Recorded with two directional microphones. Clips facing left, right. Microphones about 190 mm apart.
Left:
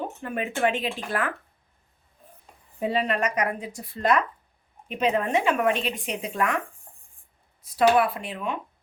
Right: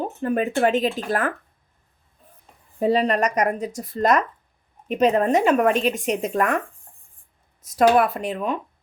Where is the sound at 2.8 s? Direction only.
40° right (ahead or behind).